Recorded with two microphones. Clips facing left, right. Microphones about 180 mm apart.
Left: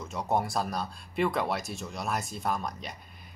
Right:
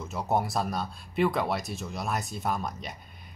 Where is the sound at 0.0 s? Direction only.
Centre (ahead or behind).